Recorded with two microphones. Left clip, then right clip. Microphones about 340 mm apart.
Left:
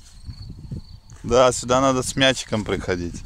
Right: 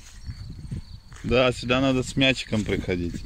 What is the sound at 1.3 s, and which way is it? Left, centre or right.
Speech, left.